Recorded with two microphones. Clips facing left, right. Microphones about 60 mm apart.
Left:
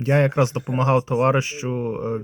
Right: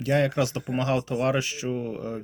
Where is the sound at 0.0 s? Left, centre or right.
Left.